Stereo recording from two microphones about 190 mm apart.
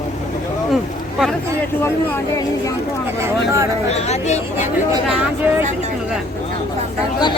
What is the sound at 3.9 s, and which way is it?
Speech, 35° left (ahead or behind).